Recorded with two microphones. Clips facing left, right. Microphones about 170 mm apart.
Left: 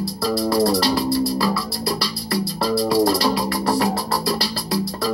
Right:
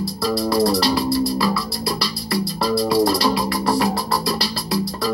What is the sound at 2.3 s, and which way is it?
Music, 45° left (ahead or behind).